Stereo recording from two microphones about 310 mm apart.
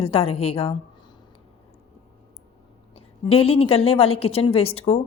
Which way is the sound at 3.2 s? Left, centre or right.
Centre.